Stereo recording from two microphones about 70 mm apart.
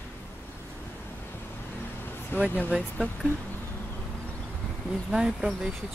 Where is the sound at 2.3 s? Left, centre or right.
Left.